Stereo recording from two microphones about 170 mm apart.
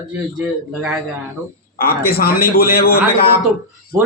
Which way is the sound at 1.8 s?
60° left (ahead or behind).